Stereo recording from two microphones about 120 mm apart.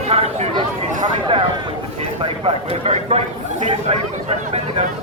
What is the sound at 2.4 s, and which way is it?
Speech, 55° right (ahead or behind).